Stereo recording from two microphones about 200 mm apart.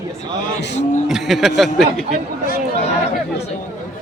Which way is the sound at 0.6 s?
60° left (ahead or behind).